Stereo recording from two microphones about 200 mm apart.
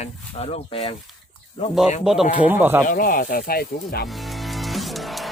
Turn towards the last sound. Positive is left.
turn(degrees=0)  # may be behind; listen again after turning